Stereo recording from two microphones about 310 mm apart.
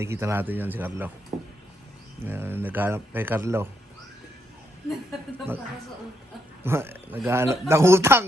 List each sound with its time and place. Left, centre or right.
0.0 s speech: centre
1.3 s a sound: right
2.2 s speech: centre
6.7 s speech: centre